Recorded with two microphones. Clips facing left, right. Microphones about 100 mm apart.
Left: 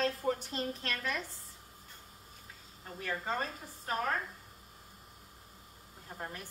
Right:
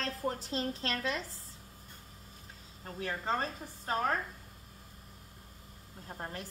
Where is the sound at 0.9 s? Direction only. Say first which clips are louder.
Right 3 dB; 25° right (ahead or behind).